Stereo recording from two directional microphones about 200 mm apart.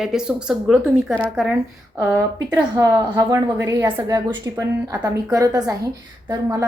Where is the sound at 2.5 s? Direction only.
20° right (ahead or behind).